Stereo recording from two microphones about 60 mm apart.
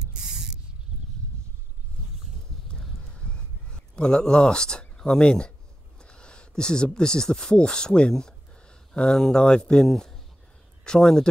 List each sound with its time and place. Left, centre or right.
2.7 s horse: centre
3.9 s speech: centre